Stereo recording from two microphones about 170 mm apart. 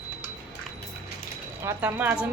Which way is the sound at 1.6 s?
15° right (ahead or behind).